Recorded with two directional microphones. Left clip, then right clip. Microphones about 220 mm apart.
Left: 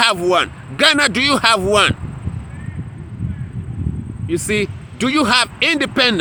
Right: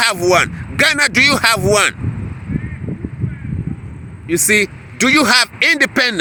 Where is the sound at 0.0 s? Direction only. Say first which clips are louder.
Right 1 dB; 15° right (ahead or behind).